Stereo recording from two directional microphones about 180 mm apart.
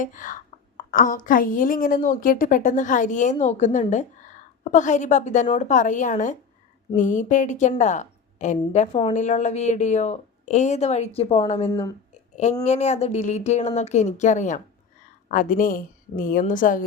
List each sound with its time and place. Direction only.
0.0 s a woman's voice: 45° left (ahead or behind)
11.7 s speech: 20° left (ahead or behind)
12.6 s a woman's voice: 40° left (ahead or behind)